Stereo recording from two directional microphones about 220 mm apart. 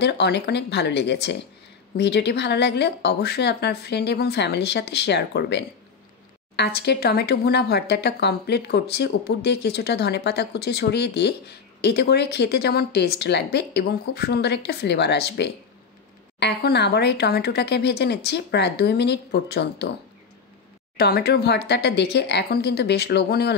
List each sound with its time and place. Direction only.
0.0 s speech: 50° left (ahead or behind)
21.0 s speech: 45° left (ahead or behind)